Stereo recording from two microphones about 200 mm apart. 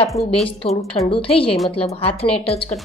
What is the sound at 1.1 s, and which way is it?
Speech, 25° left (ahead or behind).